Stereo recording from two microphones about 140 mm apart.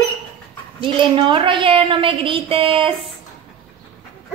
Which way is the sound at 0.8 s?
35° right (ahead or behind).